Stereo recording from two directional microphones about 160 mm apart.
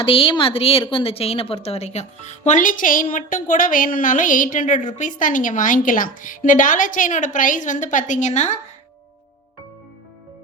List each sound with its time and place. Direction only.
0.0 s a woman's voice: 35° left (ahead or behind)